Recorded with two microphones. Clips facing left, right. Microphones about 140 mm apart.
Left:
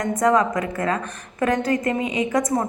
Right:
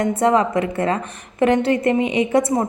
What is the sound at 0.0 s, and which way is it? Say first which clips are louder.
A woman's voice: right 2 dB; 30° right (ahead or behind).